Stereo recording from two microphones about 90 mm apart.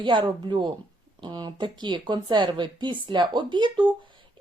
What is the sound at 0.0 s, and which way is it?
A woman's voice, 60° right (ahead or behind).